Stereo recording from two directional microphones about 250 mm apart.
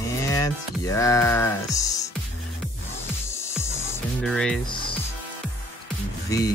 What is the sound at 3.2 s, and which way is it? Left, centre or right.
Music, centre.